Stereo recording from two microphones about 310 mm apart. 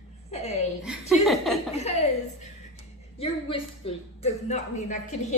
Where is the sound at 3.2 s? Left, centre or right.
Centre.